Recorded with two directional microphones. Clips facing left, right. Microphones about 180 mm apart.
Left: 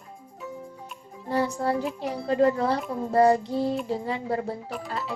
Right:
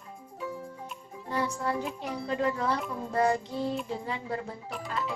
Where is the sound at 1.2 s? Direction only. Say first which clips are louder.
Left 5 dB; 35° left (ahead or behind).